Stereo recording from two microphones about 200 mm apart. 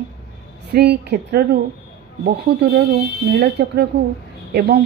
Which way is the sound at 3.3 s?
55° right (ahead or behind).